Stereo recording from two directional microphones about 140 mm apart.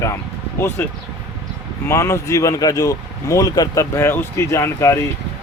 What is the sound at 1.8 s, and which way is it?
Speech, 20° left (ahead or behind).